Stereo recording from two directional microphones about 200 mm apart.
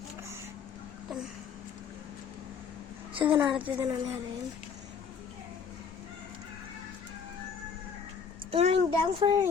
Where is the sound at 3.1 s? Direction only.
25° right (ahead or behind).